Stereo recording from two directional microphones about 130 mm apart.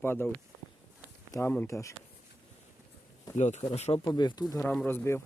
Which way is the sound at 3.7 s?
55° left (ahead or behind).